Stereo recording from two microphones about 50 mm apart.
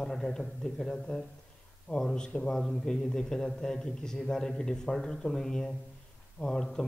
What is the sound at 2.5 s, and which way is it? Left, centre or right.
A man's voice, centre.